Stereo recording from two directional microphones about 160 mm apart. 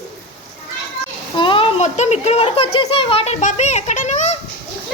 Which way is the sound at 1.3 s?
30° left (ahead or behind).